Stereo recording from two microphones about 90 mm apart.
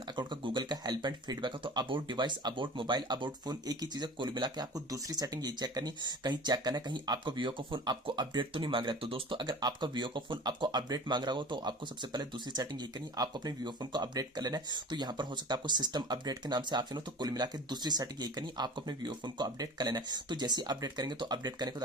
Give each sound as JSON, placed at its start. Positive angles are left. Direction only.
{"t": 0.2, "sound": "speech", "side_deg": -60}
{"t": 8.5, "sound": "speech", "side_deg": -65}
{"t": 13.1, "sound": "speech", "side_deg": -50}